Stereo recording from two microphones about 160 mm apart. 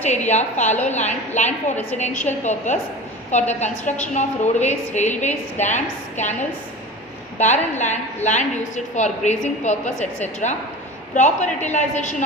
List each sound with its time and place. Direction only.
0.3 s a woman's voice: 45° left (ahead or behind)
7.3 s a woman's voice: 45° left (ahead or behind)